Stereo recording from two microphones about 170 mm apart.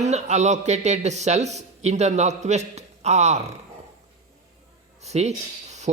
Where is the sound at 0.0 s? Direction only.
40° right (ahead or behind).